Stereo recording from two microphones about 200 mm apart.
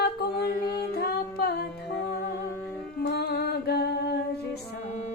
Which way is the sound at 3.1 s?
55° left (ahead or behind).